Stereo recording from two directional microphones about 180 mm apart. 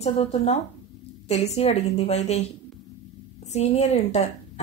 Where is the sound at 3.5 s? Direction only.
35° left (ahead or behind).